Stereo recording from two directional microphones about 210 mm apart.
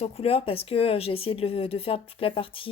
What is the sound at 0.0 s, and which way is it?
Speech, 30° left (ahead or behind).